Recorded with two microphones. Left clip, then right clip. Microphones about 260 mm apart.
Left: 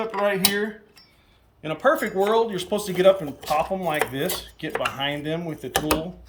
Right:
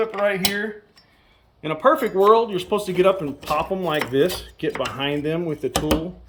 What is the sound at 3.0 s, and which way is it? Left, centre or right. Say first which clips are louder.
Speech: left 3 dB; centre.